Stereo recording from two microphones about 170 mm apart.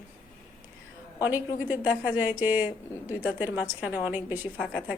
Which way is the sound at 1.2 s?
10° right (ahead or behind).